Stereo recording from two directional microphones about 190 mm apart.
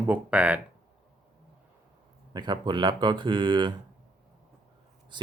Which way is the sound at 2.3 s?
25° right (ahead or behind).